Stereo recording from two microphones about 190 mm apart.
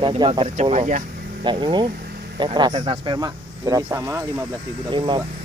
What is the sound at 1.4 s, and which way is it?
Speech, 25° right (ahead or behind).